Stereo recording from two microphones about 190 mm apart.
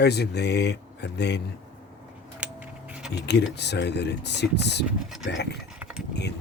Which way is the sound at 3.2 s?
60° left (ahead or behind).